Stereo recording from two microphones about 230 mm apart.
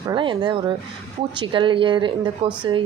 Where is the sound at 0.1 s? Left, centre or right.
Right.